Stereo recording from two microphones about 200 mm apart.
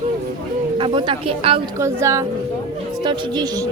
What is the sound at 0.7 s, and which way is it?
Speech, 25° right (ahead or behind).